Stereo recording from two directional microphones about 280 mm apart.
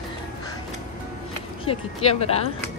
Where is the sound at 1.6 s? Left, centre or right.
Left.